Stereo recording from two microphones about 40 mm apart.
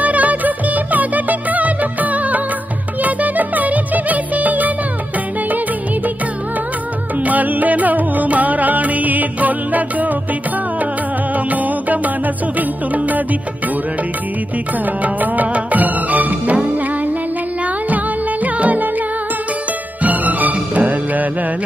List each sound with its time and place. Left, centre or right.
0.0 s music of bollywood: right
3.0 s music: right
7.2 s music: right
11.3 s music: right
15.1 s music: right
17.8 s music: right
20.0 s music: right